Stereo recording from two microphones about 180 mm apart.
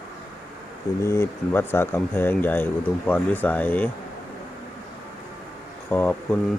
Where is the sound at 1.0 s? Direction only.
15° left (ahead or behind).